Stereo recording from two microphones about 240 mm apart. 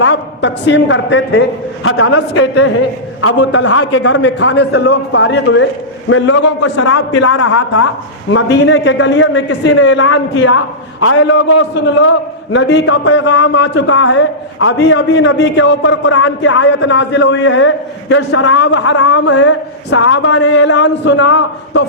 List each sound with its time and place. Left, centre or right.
0.0 s a man's voice: left
4.2 s a man's voice: left